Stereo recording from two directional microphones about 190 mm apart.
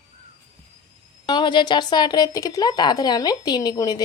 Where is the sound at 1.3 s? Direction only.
25° left (ahead or behind).